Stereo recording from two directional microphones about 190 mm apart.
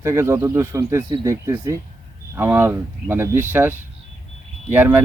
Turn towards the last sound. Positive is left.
turn(degrees=-10)  # may be behind; listen again after turning